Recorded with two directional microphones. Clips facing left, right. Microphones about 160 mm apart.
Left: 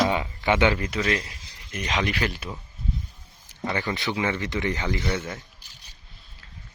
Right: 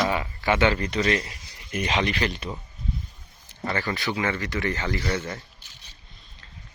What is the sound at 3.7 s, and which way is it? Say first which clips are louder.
Speech: even; 15° left (ahead or behind).